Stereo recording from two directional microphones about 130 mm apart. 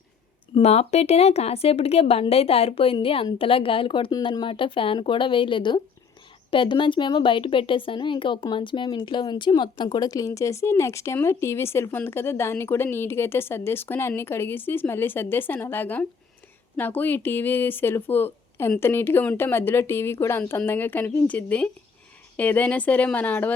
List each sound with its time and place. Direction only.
0.5 s speech: 55° left (ahead or behind); by 23.6 s 15° left (ahead or behind)